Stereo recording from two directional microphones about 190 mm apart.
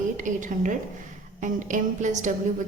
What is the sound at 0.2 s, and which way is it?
A woman's voice, 40° right (ahead or behind).